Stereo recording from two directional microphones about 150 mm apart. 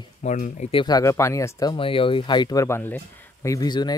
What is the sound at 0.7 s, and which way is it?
Speech, 35° left (ahead or behind).